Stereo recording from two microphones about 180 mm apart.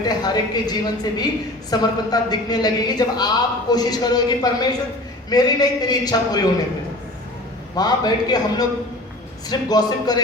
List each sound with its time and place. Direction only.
0.0 s a man's voice: 20° left (ahead or behind)
7.8 s a man's voice: 20° left (ahead or behind)